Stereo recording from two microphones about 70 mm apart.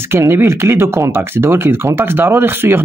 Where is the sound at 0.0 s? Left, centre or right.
Right.